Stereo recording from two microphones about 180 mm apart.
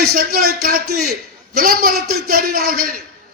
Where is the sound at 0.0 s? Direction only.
55° right (ahead or behind).